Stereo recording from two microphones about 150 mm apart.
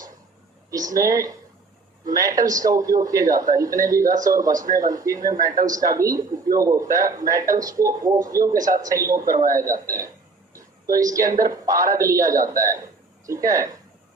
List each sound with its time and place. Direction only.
0.9 s a man's voice: 25° right (ahead or behind)
10.8 s a man's voice: 25° right (ahead or behind)